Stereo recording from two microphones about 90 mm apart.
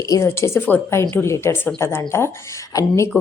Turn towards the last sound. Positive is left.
turn(degrees=35)  # may be behind; listen again after turning